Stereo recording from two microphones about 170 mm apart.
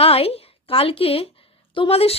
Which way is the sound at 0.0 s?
35° left (ahead or behind).